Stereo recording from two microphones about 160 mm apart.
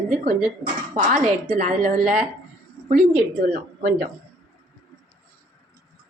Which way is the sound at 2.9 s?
70° right (ahead or behind).